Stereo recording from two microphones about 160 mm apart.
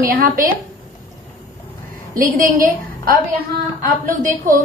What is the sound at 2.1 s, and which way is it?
Speech, 60° right (ahead or behind).